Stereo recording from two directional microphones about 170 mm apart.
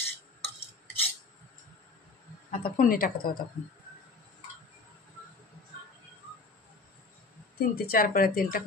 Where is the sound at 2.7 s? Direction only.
55° left (ahead or behind).